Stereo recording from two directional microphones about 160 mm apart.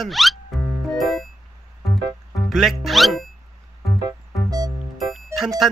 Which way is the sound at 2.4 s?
Centre (ahead or behind).